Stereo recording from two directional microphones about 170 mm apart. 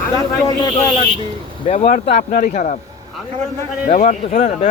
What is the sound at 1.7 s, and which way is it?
Speech, 35° left (ahead or behind).